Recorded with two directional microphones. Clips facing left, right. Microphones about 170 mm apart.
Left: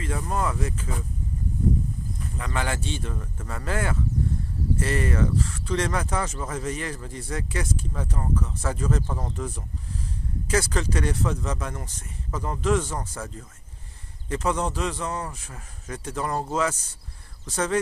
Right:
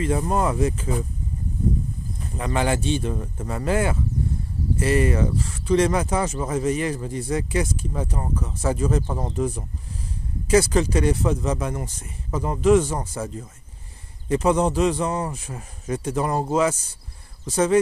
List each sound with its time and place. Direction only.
0.0 s speech: 25° right (ahead or behind)
2.3 s speech: 20° right (ahead or behind)
17.5 s speech: 10° right (ahead or behind)